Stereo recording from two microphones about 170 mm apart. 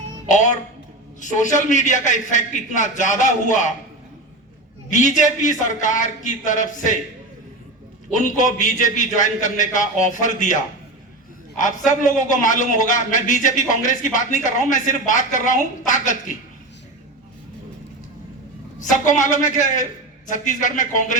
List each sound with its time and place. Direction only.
0.3 s music: 45° left (ahead or behind)
1.2 s a man's voice: 45° left (ahead or behind)
4.9 s a man's voice: 45° left (ahead or behind)
8.1 s a man's voice: 50° left (ahead or behind)
11.9 s a man's voice: 50° left (ahead or behind)
18.8 s a man's voice: 50° left (ahead or behind)